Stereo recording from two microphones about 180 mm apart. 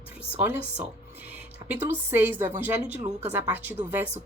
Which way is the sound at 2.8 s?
40° right (ahead or behind).